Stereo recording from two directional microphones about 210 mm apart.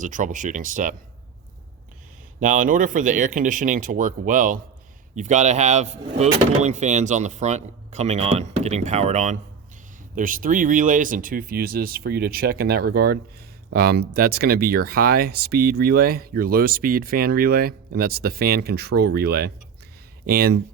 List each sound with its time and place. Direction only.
0.0 s speech: 40° right (ahead or behind)
2.4 s speech: 40° right (ahead or behind)